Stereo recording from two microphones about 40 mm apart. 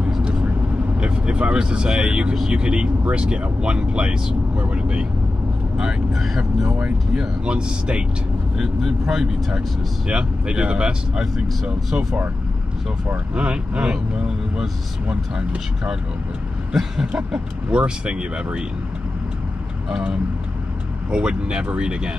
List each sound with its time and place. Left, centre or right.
0.2 s vehicle: right
0.9 s speech: right; by 6.7 s centre
7.2 s speech: right
10.0 s speech: right
13.3 s speech: right
17.6 s speech: right
21.1 s speech: right